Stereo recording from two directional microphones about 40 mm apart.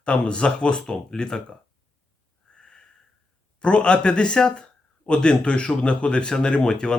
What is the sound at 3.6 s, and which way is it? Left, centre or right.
Speech, left.